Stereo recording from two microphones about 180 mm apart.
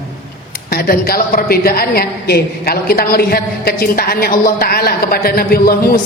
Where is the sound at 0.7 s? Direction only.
55° left (ahead or behind).